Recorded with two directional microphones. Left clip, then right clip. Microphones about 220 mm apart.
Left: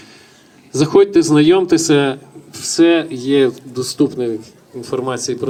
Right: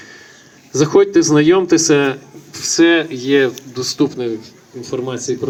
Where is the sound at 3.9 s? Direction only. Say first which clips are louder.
Left 2 dB; 55° left (ahead or behind).